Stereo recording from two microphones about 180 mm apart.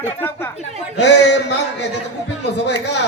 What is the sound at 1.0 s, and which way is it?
Speech, 75° left (ahead or behind).